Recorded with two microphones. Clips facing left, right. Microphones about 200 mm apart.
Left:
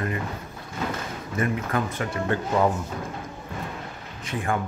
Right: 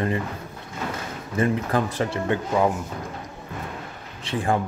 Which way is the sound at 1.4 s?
30° right (ahead or behind).